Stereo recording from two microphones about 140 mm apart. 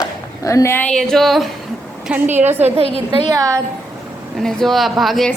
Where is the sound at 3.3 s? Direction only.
25° right (ahead or behind).